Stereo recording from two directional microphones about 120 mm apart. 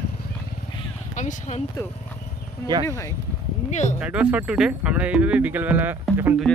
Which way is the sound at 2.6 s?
35° right (ahead or behind).